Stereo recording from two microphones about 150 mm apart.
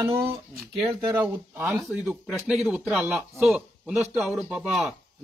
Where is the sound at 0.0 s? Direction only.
15° right (ahead or behind).